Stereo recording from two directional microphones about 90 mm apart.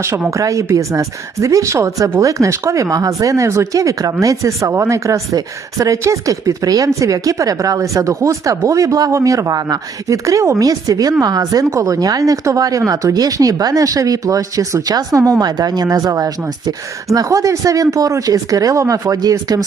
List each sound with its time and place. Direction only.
0.3 s speech: 35° right (ahead or behind)